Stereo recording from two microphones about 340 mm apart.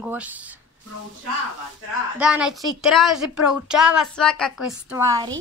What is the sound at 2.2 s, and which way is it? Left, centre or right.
A woman's voice, centre.